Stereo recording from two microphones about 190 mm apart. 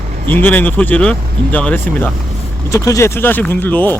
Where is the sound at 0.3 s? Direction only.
10° left (ahead or behind).